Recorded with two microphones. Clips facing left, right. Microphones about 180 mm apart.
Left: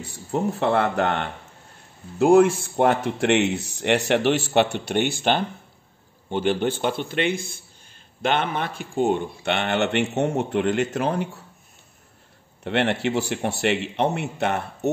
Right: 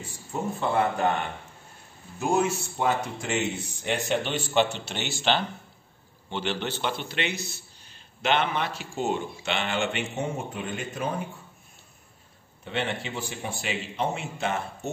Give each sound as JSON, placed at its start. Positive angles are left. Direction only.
{"t": 0.0, "sound": "a man's voice", "side_deg": 70}
{"t": 3.0, "sound": "a man's voice", "side_deg": 70}
{"t": 12.6, "sound": "a man's voice", "side_deg": 70}